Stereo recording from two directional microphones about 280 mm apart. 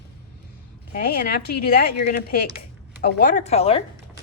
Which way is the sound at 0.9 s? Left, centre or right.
Left.